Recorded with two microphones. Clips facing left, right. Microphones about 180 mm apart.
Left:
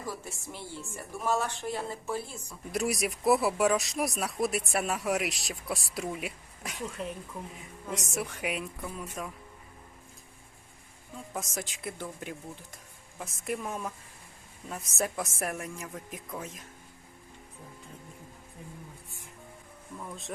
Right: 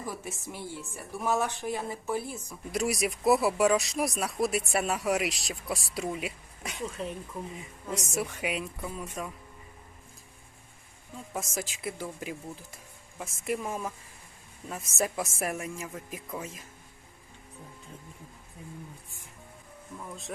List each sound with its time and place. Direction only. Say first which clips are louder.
0.1 s speech: right 1 dB; 20° right (ahead or behind)
2.7 s speech: right 1 dB; centre (ahead or behind)
11.1 s speech: right 1 dB; centre (ahead or behind)
20.0 s speech: left 1 dB; centre (ahead or behind)